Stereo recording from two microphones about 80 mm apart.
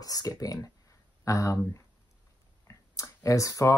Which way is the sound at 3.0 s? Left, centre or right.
Left.